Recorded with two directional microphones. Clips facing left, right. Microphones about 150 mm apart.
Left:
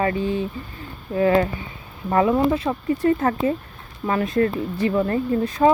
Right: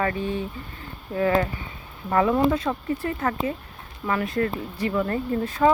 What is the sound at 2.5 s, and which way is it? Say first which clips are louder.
Speech: left 3 dB; 25° left (ahead or behind).